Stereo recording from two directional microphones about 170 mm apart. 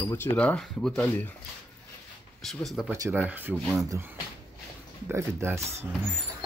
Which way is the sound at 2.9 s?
15° right (ahead or behind).